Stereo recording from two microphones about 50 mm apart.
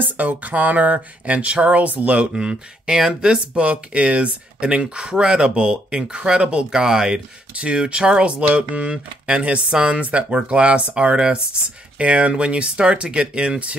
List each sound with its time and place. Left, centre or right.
0.0 s speech: right